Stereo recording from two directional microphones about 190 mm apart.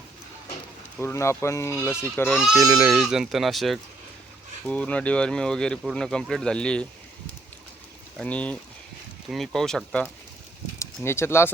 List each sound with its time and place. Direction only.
0.9 s speech: 15° left (ahead or behind)
2.6 s speech: 15° right (ahead or behind)
2.9 s speech: centre (ahead or behind)
8.2 s speech: 5° left (ahead or behind)
10.8 s speech: 15° left (ahead or behind)